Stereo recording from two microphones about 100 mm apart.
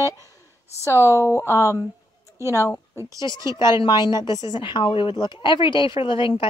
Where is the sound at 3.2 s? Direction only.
50° left (ahead or behind).